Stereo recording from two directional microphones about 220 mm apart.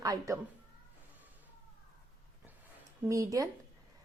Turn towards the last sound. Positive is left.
turn(degrees=-15)  # may be behind; listen again after turning